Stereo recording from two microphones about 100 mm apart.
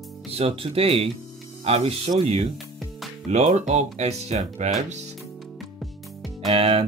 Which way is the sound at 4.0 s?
90° right.